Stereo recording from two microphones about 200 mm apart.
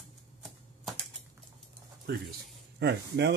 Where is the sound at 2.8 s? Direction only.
60° right (ahead or behind).